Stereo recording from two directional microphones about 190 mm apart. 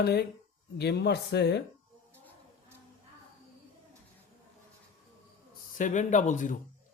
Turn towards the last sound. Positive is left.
turn(degrees=40)  # may be behind; listen again after turning